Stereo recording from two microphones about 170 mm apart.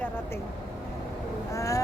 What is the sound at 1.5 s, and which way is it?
Speech, 20° left (ahead or behind).